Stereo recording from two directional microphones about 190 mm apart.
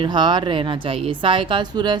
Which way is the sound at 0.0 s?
25° right (ahead or behind).